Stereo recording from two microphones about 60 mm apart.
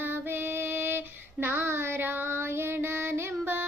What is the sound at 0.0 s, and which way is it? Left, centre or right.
Female singing, right.